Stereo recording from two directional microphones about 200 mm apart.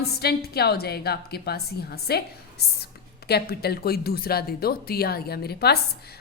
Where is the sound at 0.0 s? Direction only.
50° left (ahead or behind).